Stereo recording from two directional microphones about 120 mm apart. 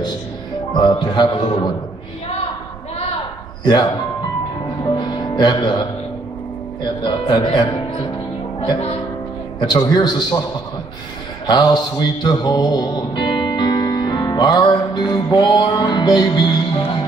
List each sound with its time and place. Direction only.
0.7 s speech: 35° left (ahead or behind)
4.9 s music: 35° left (ahead or behind)
6.8 s speech: 40° left (ahead or behind)
9.6 s speech: 35° left (ahead or behind)
11.4 s music: 40° left (ahead or behind)